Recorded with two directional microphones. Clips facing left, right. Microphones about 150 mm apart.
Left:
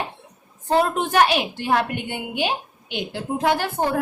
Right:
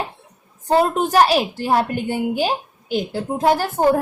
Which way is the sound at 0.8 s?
40° right (ahead or behind).